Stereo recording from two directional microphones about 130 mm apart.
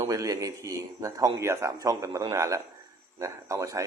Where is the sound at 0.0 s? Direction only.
25° right (ahead or behind).